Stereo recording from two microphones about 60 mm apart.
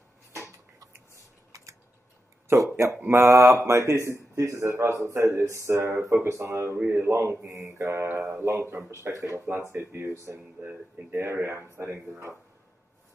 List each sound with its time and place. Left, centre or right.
1.5 s a sound: right
2.4 s speech: right
3.1 s speech: right
3.3 s a man's voice: right
6.8 s speech: right
8.7 s a man's voice: right
9.7 s speech: right
10.6 s speech: right
11.1 s speech: right